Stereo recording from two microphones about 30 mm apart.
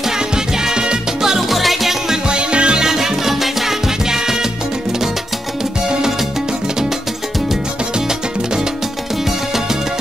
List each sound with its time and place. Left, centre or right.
0.7 s music: right
1.5 s music: centre
2.2 s music: right
2.8 s music: centre